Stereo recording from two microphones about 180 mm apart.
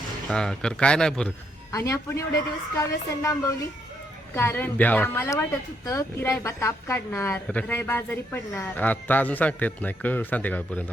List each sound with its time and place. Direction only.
0.3 s speech: 5° left (ahead or behind)
1.7 s speech: 15° left (ahead or behind)
4.4 s speech: 10° left (ahead or behind)